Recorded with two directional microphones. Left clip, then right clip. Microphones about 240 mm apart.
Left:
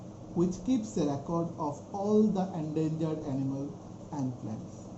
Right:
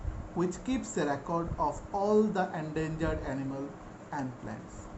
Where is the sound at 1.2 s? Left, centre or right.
Right.